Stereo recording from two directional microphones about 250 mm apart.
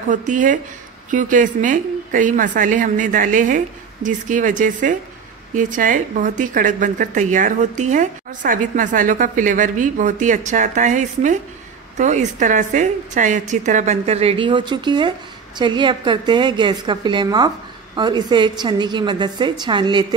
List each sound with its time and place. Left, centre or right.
0.1 s a woman's voice: right